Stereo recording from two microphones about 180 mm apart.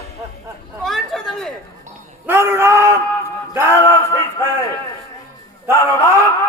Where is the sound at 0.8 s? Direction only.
Centre (ahead or behind).